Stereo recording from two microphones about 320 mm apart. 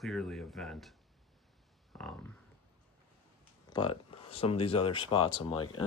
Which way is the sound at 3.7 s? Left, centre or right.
Centre.